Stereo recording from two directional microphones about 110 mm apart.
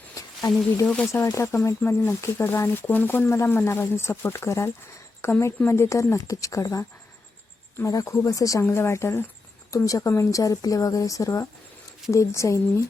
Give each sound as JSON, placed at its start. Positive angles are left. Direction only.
{"t": 0.1, "sound": "a sound", "side_deg": 30}
{"t": 0.9, "sound": "speech", "side_deg": 10}
{"t": 1.2, "sound": "speech", "side_deg": 25}